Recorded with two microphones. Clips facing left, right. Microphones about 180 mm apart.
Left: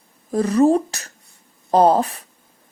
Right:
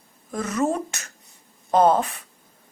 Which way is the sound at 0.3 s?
35° left (ahead or behind).